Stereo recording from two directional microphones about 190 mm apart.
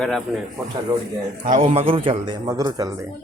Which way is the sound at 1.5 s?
45° right (ahead or behind).